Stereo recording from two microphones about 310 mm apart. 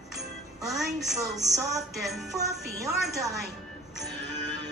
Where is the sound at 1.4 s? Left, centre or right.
Centre.